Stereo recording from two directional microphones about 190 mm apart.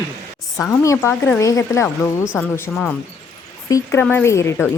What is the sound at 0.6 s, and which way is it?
Speech, 15° left (ahead or behind).